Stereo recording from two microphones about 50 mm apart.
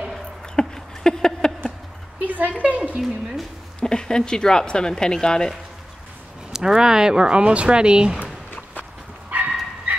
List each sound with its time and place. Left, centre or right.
0.6 s a sound: centre
2.2 s a sound: right
3.0 s a woman's voice: centre
3.8 s speech: centre
6.5 s speech: centre
9.3 s dog: right